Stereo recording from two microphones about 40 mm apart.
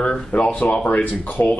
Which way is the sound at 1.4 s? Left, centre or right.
Left.